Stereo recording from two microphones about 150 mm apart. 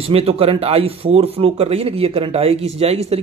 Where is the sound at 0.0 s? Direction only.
40° right (ahead or behind).